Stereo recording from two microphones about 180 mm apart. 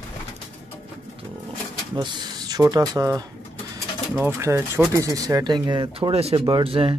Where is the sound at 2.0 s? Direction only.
25° right (ahead or behind).